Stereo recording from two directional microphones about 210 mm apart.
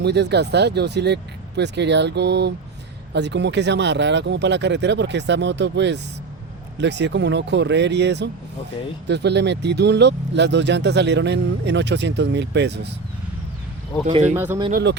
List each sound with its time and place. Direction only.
0.0 s speech: 55° right (ahead or behind)
14.1 s speech: 30° right (ahead or behind)
14.3 s speech: 10° right (ahead or behind)
14.7 s speech: 50° right (ahead or behind)